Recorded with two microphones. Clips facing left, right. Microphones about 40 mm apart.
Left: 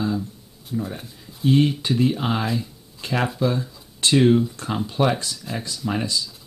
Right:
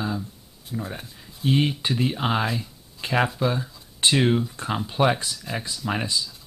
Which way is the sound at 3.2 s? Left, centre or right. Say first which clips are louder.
Left 2 dB; centre.